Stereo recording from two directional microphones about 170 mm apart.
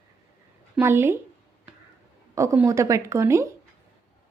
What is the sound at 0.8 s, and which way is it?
Speech, 15° right (ahead or behind).